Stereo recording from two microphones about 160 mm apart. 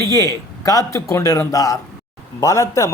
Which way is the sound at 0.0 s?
20° left (ahead or behind).